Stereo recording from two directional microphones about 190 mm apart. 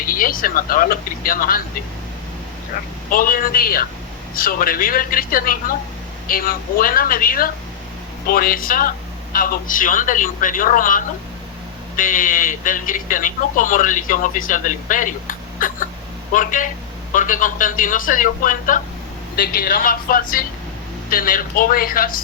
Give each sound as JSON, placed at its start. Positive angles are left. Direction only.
{"t": 0.1, "sound": "speech", "side_deg": 50}
{"t": 3.1, "sound": "speech", "side_deg": 50}